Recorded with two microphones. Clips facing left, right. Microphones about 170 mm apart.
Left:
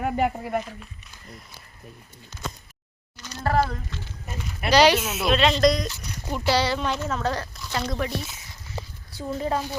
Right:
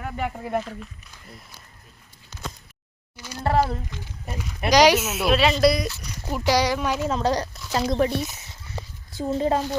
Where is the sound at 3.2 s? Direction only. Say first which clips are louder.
Right 2 dB; 10° right (ahead or behind).